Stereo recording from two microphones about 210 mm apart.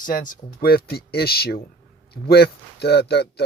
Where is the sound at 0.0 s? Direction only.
40° left (ahead or behind).